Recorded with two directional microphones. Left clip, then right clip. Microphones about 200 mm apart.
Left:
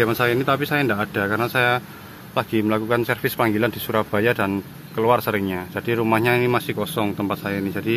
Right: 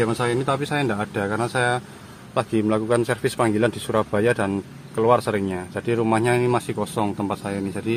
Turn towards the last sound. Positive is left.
turn(degrees=0)  # may be behind; listen again after turning